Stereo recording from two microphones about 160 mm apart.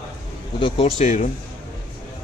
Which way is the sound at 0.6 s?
40° left (ahead or behind).